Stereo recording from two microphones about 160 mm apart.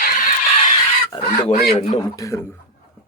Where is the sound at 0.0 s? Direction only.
65° left (ahead or behind).